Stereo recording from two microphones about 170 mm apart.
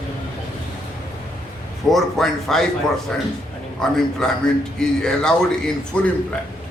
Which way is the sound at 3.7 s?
5° left (ahead or behind).